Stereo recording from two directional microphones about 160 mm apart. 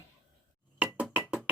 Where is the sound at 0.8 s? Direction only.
5° right (ahead or behind).